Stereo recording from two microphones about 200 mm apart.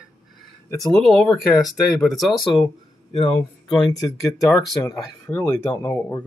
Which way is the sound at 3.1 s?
25° left (ahead or behind).